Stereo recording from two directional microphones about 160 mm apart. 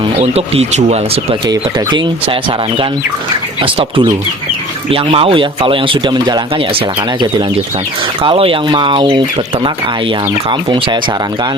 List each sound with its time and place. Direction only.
0.0 s speech: 40° right (ahead or behind)
1.5 s speech: 30° right (ahead or behind)
10.5 s speech: 30° right (ahead or behind)